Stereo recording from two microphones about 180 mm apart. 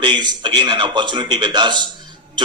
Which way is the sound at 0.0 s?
25° right (ahead or behind).